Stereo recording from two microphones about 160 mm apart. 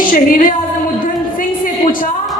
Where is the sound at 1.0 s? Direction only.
60° left (ahead or behind).